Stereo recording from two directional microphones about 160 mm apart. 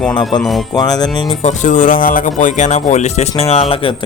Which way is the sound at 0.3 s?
Centre (ahead or behind).